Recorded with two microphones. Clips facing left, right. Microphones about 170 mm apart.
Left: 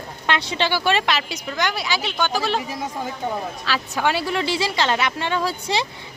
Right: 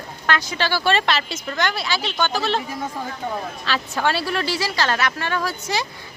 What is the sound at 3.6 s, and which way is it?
A woman's voice, 5° left (ahead or behind).